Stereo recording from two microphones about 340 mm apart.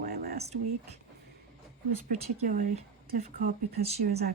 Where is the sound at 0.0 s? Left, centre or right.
Right.